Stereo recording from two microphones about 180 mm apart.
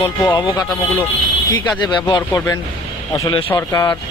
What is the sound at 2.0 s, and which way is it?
Speech, 25° left (ahead or behind).